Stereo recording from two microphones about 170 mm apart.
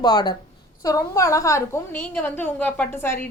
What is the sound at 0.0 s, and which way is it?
A woman's voice, 25° left (ahead or behind).